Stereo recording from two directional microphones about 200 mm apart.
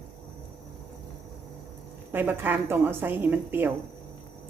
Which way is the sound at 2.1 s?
10° right (ahead or behind).